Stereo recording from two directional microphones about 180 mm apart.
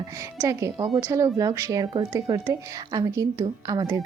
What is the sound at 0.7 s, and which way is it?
Speech, 25° right (ahead or behind).